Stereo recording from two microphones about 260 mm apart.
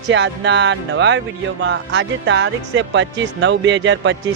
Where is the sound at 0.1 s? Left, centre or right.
Right.